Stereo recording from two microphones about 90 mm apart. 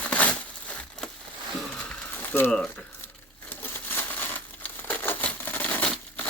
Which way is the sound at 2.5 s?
10° left (ahead or behind).